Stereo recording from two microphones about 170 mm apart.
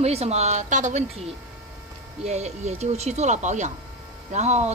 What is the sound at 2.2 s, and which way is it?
Speech, 40° right (ahead or behind).